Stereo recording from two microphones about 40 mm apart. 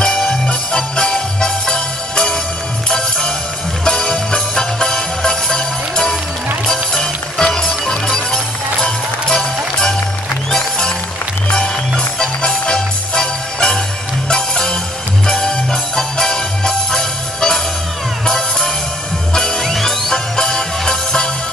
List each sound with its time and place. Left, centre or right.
0.0 s music: centre
11.5 s music: centre